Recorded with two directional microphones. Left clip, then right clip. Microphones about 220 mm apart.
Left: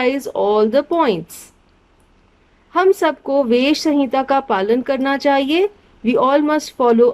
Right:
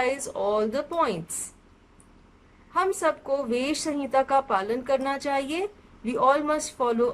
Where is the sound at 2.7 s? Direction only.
40° left (ahead or behind).